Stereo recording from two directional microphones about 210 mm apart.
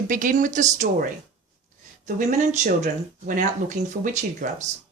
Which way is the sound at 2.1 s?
35° right (ahead or behind).